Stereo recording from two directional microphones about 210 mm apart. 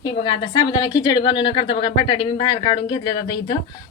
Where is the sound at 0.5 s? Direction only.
20° left (ahead or behind).